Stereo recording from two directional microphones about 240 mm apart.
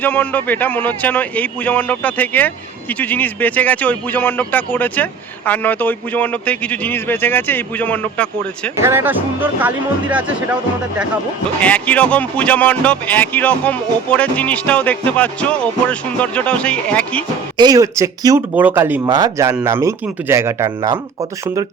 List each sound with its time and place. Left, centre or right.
0.0 s speech: centre
8.8 s speech: centre
11.6 s speech: centre
17.6 s speech: centre